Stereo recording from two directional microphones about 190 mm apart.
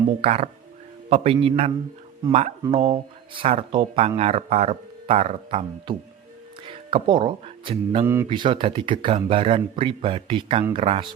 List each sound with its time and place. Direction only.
0.2 s speech: 35° right (ahead or behind)
8.0 s speech: 10° right (ahead or behind)
8.3 s speech: 25° right (ahead or behind)